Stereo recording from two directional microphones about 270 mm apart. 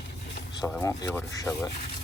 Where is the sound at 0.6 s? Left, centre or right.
Centre.